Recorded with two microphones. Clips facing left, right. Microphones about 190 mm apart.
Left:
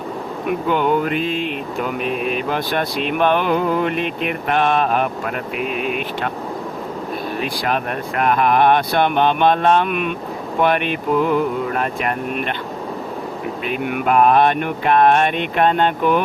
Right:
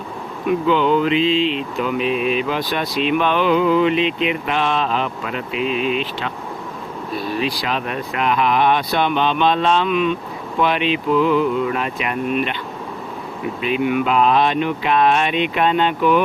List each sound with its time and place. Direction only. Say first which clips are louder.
0.7 s mantra: right 2 dB; 50° left (ahead or behind)
7.3 s mantra: left 1 dB; 50° left (ahead or behind)
13.7 s mantra: right 2 dB; 50° left (ahead or behind)